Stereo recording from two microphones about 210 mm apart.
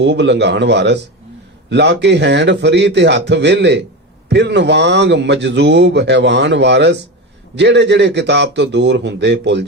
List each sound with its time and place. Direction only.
0.0 s a man's voice: 55° right (ahead or behind)